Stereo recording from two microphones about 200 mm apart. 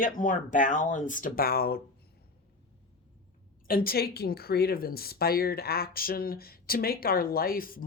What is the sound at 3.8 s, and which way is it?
A woman's voice, 50° left (ahead or behind).